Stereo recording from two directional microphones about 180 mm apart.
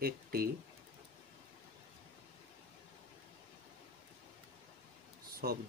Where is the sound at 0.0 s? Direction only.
55° right (ahead or behind).